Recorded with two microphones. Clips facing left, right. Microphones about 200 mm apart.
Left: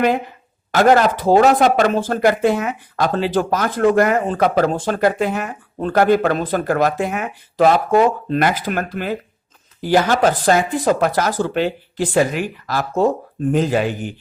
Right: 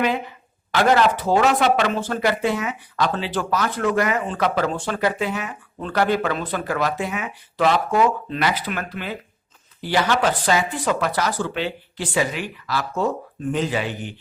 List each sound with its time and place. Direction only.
0.7 s speech: 45° left (ahead or behind)